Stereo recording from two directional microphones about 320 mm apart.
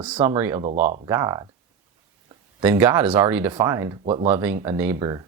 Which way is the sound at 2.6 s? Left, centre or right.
Centre.